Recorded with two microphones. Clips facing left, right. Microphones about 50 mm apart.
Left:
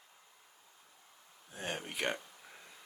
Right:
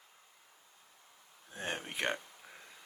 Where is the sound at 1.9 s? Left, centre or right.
Right.